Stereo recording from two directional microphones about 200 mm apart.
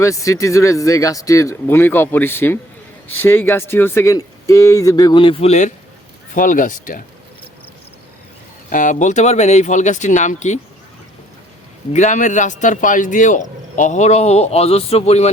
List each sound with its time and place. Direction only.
0.0 s speech: 15° left (ahead or behind); by 7.0 s 40° left (ahead or behind)
8.7 s speech: 40° left (ahead or behind)
11.9 s speech: 40° left (ahead or behind)